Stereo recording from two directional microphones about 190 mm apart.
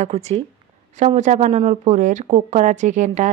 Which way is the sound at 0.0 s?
35° right (ahead or behind).